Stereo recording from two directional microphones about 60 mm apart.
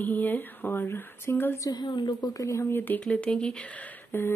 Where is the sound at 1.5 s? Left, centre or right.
Left.